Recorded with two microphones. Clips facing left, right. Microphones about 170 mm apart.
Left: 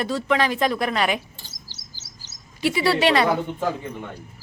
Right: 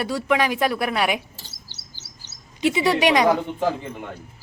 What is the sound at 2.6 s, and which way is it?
Speech, 20° right (ahead or behind).